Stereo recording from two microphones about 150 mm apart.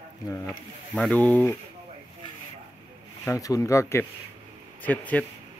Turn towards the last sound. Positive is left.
turn(degrees=10)  # may be behind; listen again after turning